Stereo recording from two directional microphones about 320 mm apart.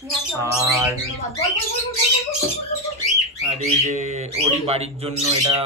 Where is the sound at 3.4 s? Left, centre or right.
Right.